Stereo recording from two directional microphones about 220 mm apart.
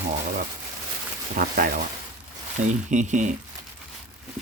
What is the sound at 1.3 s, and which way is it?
Speech, 40° right (ahead or behind).